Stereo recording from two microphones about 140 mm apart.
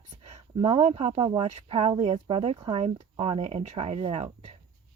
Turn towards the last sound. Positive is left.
turn(degrees=-45)  # may be behind; listen again after turning